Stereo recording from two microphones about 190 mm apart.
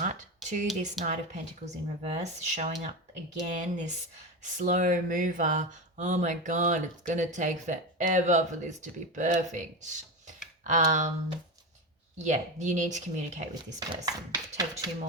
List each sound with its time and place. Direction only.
0.4 s speech: 40° right (ahead or behind)
12.2 s speech: 40° right (ahead or behind)
13.5 s speech: 20° right (ahead or behind)